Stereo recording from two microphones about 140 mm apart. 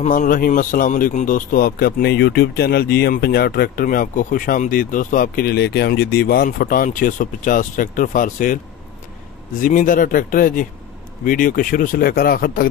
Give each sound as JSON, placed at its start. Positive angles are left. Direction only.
{"t": 0.0, "sound": "a man's voice", "side_deg": 65}
{"t": 9.6, "sound": "speech", "side_deg": 75}